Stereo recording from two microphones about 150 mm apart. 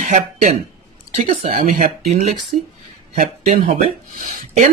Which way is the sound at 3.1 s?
65° right (ahead or behind).